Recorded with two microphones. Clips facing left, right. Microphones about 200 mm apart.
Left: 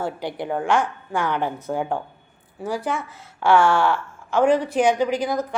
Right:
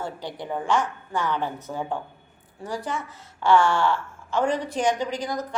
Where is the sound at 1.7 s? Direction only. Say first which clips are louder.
Left 8 dB; 60° left (ahead or behind).